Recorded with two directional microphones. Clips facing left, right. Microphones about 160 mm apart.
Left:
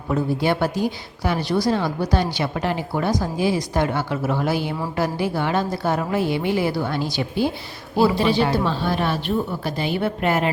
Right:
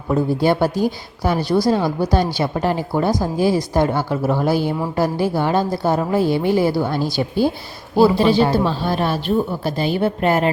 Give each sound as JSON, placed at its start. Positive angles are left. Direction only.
{"t": 0.1, "sound": "a woman's voice", "side_deg": -40}